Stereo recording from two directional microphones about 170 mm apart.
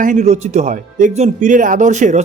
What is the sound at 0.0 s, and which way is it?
Speech, 45° right (ahead or behind).